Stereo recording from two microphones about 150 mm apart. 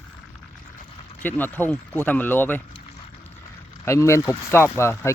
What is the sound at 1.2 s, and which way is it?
Speech, 10° left (ahead or behind).